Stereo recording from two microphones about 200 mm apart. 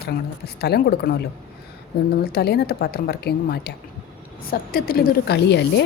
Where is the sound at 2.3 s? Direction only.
55° left (ahead or behind).